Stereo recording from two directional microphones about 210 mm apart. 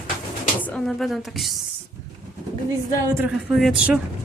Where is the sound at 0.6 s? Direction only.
5° left (ahead or behind).